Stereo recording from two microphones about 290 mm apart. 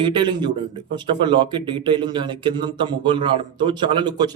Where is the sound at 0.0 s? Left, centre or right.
Centre.